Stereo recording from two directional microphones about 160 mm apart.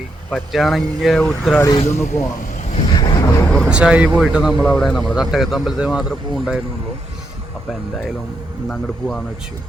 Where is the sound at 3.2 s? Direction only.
10° left (ahead or behind).